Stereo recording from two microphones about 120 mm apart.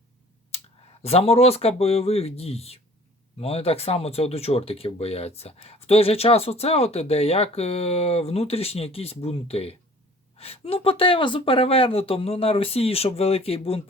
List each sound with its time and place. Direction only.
1.0 s speech: 55° left (ahead or behind)